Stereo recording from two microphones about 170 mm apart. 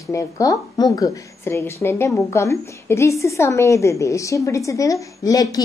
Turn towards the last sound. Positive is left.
turn(degrees=20)  # may be behind; listen again after turning